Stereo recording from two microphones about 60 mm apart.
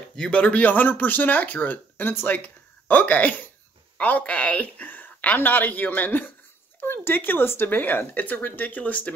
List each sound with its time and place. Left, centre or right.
0.1 s speech: centre